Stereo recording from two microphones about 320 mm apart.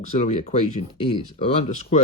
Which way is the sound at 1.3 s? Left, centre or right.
Centre.